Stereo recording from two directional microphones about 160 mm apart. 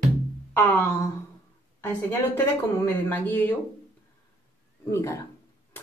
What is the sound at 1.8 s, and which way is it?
Speech, 15° left (ahead or behind).